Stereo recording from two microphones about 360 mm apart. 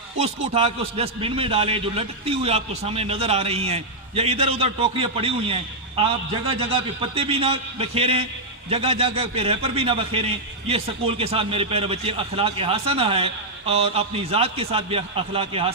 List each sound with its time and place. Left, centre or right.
0.5 s a man's voice: centre